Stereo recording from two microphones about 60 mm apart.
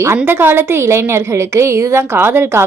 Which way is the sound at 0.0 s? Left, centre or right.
Right.